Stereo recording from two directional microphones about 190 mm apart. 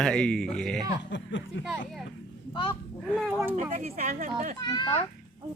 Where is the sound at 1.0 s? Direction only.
70° left (ahead or behind).